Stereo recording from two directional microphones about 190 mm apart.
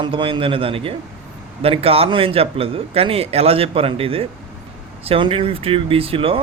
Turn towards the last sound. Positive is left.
turn(degrees=-30)  # may be behind; listen again after turning